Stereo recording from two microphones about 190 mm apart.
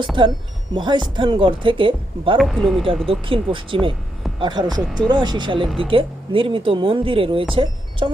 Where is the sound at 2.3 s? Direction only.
Centre (ahead or behind).